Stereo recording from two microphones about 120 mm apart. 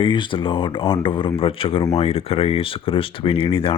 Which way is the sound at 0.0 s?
40° left (ahead or behind).